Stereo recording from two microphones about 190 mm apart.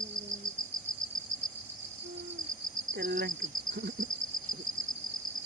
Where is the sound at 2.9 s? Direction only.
55° right (ahead or behind).